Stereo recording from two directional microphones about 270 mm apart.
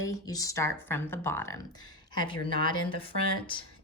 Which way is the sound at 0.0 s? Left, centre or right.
Centre.